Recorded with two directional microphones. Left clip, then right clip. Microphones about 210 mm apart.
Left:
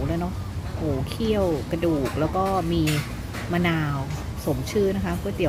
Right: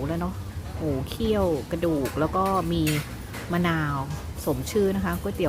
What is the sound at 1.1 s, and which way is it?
Speech, 20° right (ahead or behind).